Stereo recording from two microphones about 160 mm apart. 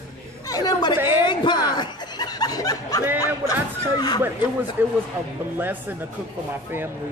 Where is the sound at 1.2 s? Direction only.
30° left (ahead or behind).